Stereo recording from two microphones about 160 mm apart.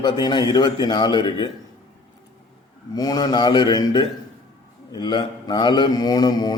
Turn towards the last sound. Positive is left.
turn(degrees=25)  # may be behind; listen again after turning